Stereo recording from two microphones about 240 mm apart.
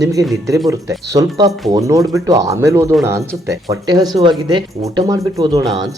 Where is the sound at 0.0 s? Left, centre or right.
Centre.